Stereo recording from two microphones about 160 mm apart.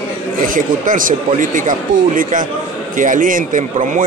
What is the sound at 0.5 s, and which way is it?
Speech, 60° right (ahead or behind).